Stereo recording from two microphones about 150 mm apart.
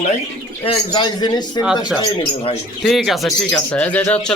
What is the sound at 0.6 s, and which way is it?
Speech, 35° left (ahead or behind).